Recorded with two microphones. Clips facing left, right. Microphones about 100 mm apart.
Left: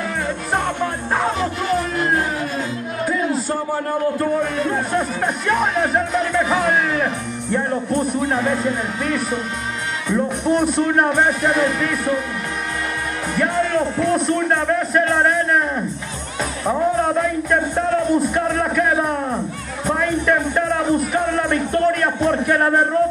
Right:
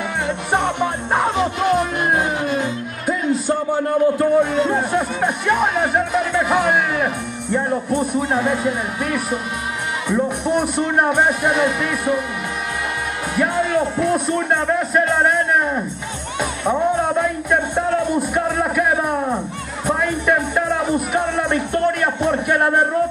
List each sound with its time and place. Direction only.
0.6 s music: 15° right (ahead or behind)
4.2 s speech: 20° right (ahead or behind)
4.9 s speech: 5° right (ahead or behind)
13.3 s speech: 10° right (ahead or behind)